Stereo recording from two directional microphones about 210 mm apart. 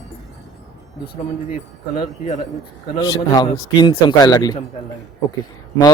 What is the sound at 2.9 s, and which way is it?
A man's voice, 15° left (ahead or behind).